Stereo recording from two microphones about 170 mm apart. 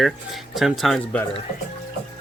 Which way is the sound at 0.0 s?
Centre (ahead or behind).